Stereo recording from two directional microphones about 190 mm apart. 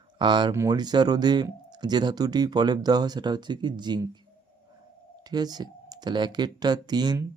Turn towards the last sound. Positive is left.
turn(degrees=-20)  # may be behind; listen again after turning